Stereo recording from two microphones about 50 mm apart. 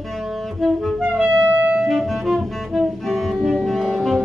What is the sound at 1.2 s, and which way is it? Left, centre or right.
Music, right.